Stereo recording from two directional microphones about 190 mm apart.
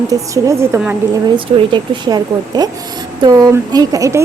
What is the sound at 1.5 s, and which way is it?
Speech, 25° right (ahead or behind).